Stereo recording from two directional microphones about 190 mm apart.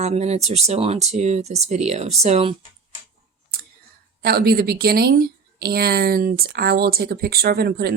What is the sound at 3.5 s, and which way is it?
Clicking, 55° right (ahead or behind).